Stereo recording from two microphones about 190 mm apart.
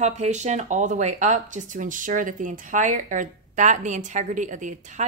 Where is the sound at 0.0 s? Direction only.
35° right (ahead or behind).